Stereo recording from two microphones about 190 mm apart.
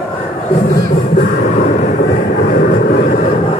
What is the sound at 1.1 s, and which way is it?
Vehicle, 40° left (ahead or behind).